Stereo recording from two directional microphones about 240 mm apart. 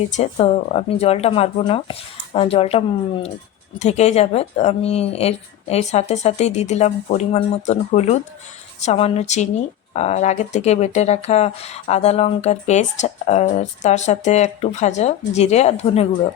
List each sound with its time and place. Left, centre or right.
0.2 s speech: left